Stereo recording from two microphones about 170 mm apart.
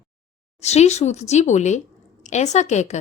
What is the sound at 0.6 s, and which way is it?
A woman's voice, 40° left (ahead or behind).